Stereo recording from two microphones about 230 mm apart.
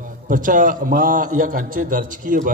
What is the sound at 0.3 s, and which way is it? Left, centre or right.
A man's voice, right.